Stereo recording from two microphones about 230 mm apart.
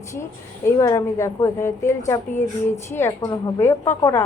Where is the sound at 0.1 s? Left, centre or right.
Centre.